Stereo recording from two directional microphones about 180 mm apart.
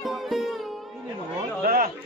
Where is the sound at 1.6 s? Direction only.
55° right (ahead or behind).